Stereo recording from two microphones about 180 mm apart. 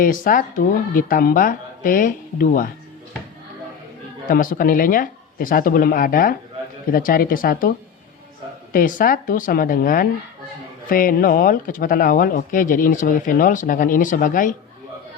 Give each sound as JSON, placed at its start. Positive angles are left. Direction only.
{"t": 0.0, "sound": "speech", "side_deg": 50}
{"t": 4.3, "sound": "speech", "side_deg": 50}
{"t": 8.7, "sound": "speech", "side_deg": 50}